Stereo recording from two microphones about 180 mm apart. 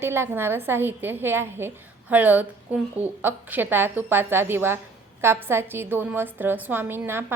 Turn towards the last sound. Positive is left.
turn(degrees=-10)  # may be behind; listen again after turning